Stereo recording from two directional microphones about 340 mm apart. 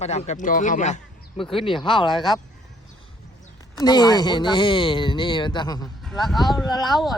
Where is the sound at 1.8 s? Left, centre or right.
Centre.